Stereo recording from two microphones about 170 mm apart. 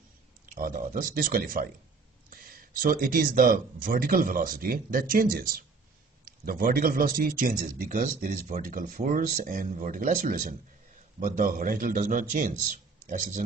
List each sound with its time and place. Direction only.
0.5 s speech: 55° right (ahead or behind)